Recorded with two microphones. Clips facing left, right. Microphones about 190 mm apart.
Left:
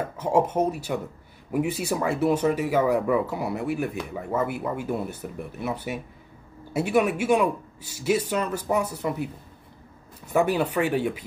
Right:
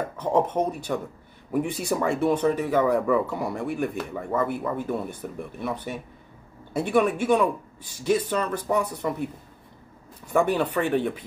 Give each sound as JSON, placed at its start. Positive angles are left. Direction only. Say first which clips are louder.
{"t": 0.2, "sound": "a man's voice", "louder": "left 1 dB", "side_deg": 10}
{"t": 10.3, "sound": "a man's voice", "louder": "even", "side_deg": 5}